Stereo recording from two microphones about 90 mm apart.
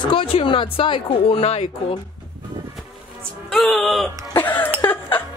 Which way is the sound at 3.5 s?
Centre (ahead or behind).